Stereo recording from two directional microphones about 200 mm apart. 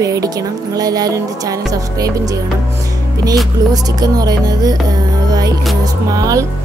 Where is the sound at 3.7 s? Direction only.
20° right (ahead or behind).